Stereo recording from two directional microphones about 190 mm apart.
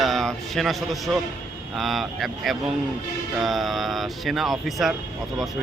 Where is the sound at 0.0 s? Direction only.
Centre (ahead or behind).